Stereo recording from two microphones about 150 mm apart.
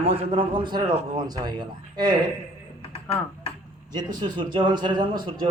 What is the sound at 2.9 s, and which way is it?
Tick-tock, 40° left (ahead or behind).